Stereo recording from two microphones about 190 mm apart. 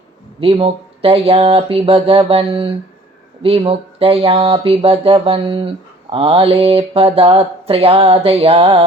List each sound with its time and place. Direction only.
0.3 s speech: 25° right (ahead or behind)